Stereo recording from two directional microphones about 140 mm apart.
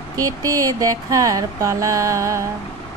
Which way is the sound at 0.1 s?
25° right (ahead or behind).